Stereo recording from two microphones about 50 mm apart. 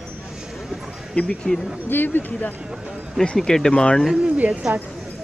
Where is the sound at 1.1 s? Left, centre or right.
Centre.